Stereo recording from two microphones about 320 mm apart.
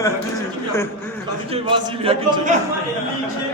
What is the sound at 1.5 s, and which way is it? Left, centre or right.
A man's voice, centre.